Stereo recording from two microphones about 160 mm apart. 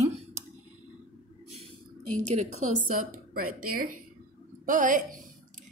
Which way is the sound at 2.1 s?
50° right (ahead or behind).